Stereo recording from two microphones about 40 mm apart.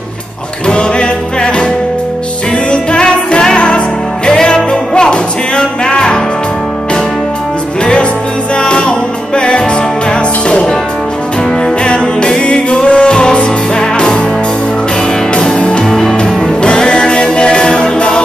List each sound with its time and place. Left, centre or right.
0.7 s music: left
2.7 s music: left
7.8 s music: left
11.8 s music: left
15.3 s music: left
15.9 s music: centre
16.6 s music: left